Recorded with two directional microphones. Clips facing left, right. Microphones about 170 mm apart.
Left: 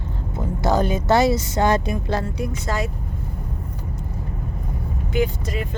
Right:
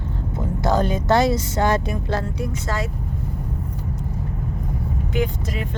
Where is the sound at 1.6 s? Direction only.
20° left (ahead or behind).